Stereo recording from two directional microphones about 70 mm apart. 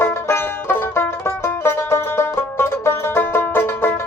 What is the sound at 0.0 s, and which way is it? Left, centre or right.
Music, left.